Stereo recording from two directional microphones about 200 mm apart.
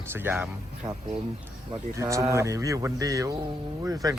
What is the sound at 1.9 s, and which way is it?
Speech, 15° right (ahead or behind).